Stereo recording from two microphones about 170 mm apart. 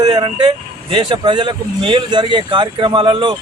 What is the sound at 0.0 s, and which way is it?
Speech, 25° right (ahead or behind).